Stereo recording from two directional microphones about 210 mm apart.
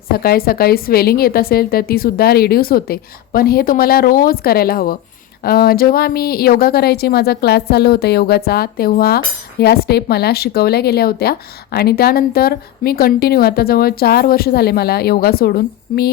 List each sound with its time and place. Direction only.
0.1 s speech: 45° left (ahead or behind)